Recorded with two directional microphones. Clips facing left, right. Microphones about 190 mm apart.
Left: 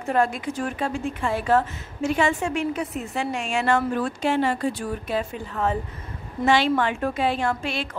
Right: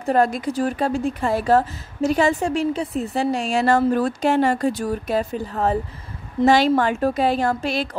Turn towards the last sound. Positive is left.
turn(degrees=-40)  # may be behind; listen again after turning